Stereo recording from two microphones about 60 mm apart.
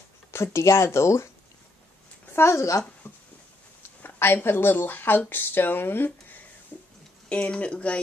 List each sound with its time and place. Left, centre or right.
0.3 s speech: left
2.3 s speech: left
4.0 s speech: left
6.7 s a sound: left
7.2 s speech: centre